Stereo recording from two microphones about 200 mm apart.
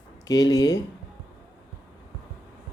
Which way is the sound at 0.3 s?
20° left (ahead or behind).